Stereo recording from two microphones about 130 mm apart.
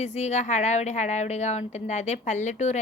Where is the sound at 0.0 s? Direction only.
60° left (ahead or behind).